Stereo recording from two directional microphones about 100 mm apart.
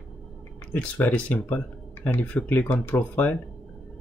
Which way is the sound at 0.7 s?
15° left (ahead or behind).